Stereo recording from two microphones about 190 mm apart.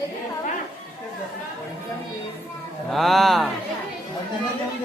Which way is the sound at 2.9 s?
Centre (ahead or behind).